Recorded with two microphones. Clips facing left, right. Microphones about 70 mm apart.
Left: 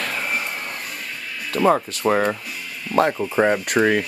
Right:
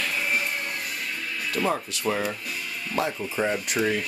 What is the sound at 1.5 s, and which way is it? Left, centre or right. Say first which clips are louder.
Speech: left 9 dB; left.